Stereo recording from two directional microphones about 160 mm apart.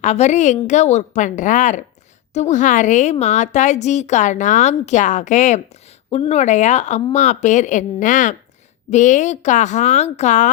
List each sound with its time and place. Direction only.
0.0 s a woman's voice: 45° left (ahead or behind)